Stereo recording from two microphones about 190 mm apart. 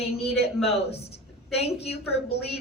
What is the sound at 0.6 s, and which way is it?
A woman's voice, 35° left (ahead or behind).